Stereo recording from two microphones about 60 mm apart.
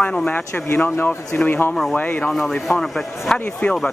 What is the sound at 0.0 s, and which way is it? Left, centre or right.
Speech, centre.